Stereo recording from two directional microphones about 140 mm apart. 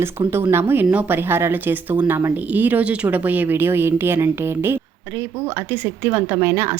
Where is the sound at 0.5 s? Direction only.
15° right (ahead or behind).